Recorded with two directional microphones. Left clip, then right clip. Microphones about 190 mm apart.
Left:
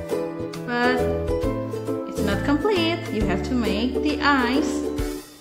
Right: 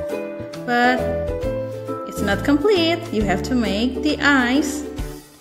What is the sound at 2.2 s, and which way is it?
A woman's voice, 20° right (ahead or behind).